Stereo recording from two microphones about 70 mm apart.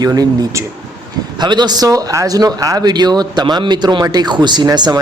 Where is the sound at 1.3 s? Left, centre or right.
Right.